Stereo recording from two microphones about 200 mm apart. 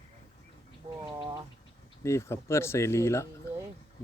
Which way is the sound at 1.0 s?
25° right (ahead or behind).